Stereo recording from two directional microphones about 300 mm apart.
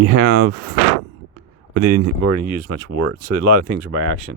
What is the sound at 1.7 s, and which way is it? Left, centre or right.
Speech, right.